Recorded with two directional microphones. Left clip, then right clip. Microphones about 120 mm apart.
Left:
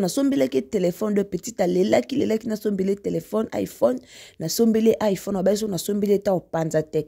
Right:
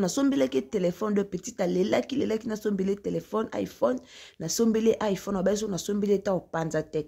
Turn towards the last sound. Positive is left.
turn(degrees=60)  # may be behind; listen again after turning